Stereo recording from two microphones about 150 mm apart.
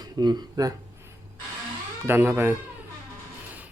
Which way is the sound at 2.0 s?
15° right (ahead or behind).